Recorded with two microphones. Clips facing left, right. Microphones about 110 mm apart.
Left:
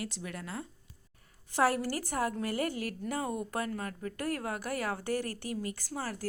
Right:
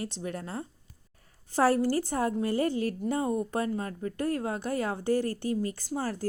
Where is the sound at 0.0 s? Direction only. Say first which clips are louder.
Right 5 dB; 30° right (ahead or behind).